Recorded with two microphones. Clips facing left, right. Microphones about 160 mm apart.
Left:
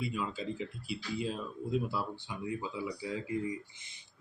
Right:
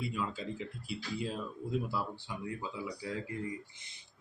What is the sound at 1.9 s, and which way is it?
Speech, centre (ahead or behind).